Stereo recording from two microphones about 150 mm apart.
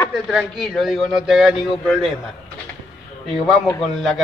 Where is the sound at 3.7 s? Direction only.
Centre (ahead or behind).